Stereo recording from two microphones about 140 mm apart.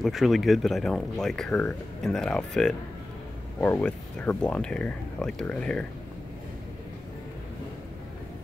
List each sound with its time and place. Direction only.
0.0 s speech: centre (ahead or behind)